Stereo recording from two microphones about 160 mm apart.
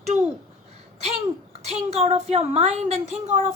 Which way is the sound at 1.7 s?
40° right (ahead or behind).